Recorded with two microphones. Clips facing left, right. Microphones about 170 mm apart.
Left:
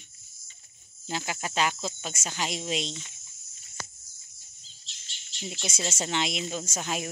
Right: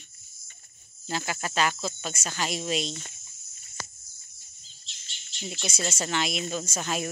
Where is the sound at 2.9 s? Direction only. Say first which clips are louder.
Right 2 dB; 50° right (ahead or behind).